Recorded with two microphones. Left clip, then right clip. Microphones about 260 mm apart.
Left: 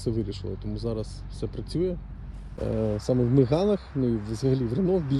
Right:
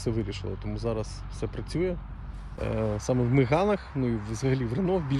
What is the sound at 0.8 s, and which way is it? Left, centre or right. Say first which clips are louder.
Speech: right 1 dB; right.